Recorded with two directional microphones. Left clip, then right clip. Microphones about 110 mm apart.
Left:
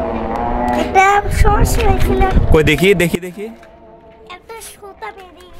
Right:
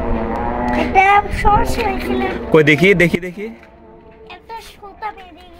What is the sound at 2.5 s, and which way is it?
Speech, 25° left (ahead or behind).